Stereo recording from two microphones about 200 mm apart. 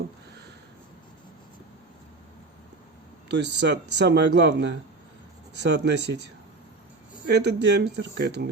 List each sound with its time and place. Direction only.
3.2 s speech: 60° right (ahead or behind)